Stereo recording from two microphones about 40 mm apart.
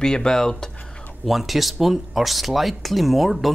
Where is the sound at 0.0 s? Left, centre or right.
Centre.